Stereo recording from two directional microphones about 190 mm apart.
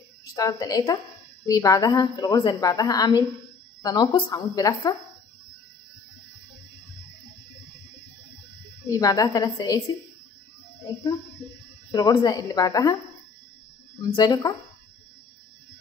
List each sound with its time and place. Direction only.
0.2 s a woman's voice: 20° left (ahead or behind)
8.9 s a woman's voice: 20° left (ahead or behind)
11.9 s a woman's voice: 20° left (ahead or behind)
14.1 s a woman's voice: 20° left (ahead or behind)